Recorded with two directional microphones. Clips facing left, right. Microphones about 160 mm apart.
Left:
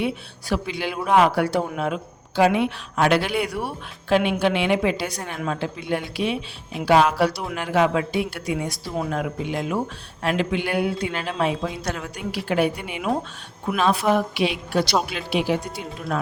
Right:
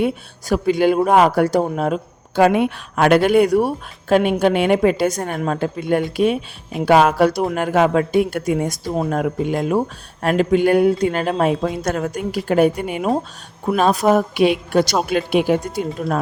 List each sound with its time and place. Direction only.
0.0 s speech: 45° right (ahead or behind)